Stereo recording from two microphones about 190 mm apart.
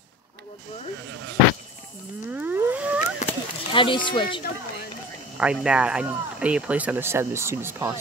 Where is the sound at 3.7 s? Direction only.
25° left (ahead or behind).